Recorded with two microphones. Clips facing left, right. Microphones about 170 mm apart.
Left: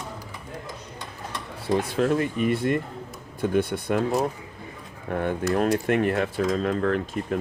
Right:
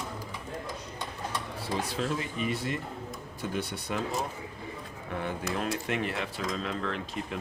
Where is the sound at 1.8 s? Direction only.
55° left (ahead or behind).